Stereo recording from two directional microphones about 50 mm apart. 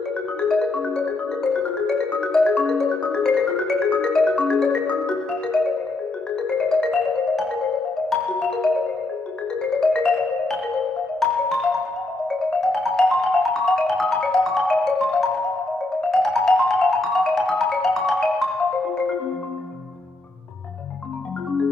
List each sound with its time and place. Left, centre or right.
0.4 s music: left
2.1 s music: left
6.8 s music: centre
9.8 s music: centre
12.3 s music: centre